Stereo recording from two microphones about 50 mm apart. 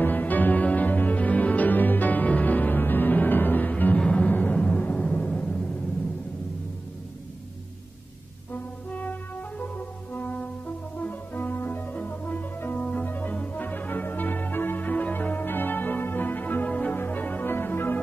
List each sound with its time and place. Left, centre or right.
0.0 s music: left
4.0 s music: left
9.6 s french horn: left
11.0 s music: left
13.0 s brass instrument: left
13.3 s music: left
17.5 s music: left